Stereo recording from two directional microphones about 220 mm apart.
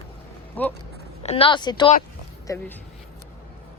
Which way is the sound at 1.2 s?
25° left (ahead or behind).